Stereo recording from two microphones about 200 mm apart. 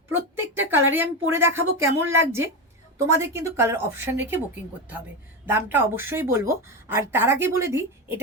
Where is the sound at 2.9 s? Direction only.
15° right (ahead or behind).